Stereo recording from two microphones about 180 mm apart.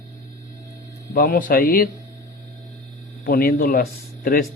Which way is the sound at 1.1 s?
55° left (ahead or behind).